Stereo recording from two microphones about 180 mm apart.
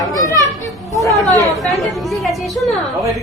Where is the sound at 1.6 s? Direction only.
Centre (ahead or behind).